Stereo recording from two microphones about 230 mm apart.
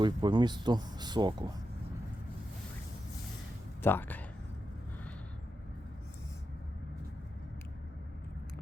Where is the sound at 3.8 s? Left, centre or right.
Centre.